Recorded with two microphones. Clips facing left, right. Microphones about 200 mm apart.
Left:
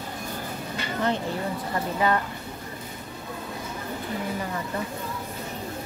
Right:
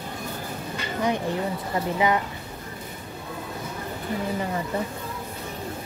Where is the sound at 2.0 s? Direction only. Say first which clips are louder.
Right 1 dB; 15° right (ahead or behind).